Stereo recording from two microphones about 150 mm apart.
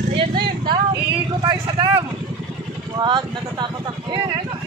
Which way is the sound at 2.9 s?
30° right (ahead or behind).